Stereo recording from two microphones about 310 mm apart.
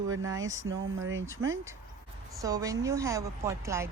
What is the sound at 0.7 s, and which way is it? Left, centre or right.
Speech, right.